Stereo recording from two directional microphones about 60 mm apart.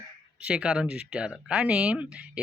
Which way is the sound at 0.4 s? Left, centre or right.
Centre.